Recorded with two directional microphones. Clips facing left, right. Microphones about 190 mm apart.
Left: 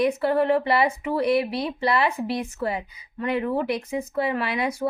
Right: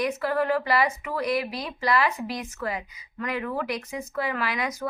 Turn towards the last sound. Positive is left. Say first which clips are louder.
# left 4 dB
turn(degrees=25)  # may be behind; listen again after turning